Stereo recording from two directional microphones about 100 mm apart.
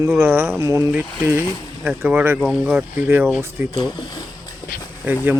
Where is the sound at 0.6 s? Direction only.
30° right (ahead or behind).